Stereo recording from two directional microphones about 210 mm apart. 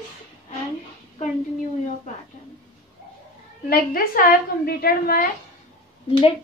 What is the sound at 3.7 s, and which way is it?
A woman's voice, 45° left (ahead or behind).